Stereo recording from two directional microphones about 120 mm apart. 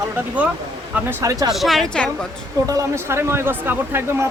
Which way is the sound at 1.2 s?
30° right (ahead or behind).